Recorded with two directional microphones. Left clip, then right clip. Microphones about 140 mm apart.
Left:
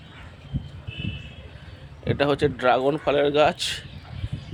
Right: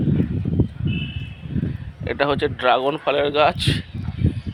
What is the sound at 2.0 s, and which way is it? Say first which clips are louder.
Speech: right 2 dB; centre (ahead or behind).